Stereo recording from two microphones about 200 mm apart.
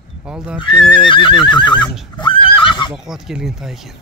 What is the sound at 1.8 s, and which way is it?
Speech, centre (ahead or behind).